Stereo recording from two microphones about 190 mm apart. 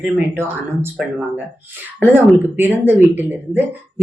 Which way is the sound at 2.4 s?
10° right (ahead or behind).